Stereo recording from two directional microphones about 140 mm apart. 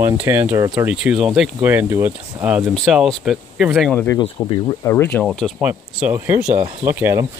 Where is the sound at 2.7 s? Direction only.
Centre (ahead or behind).